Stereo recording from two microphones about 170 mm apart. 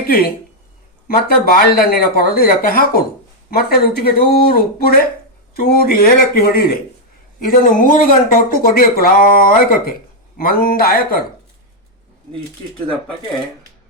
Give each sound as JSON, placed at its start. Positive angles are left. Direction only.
{"t": 1.0, "sound": "speech", "side_deg": 60}